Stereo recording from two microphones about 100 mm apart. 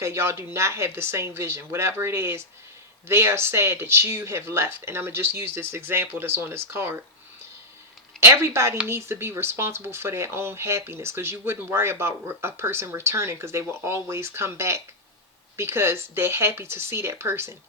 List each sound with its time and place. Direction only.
0.0 s speech: 25° right (ahead or behind)
8.2 s speech: 25° right (ahead or behind)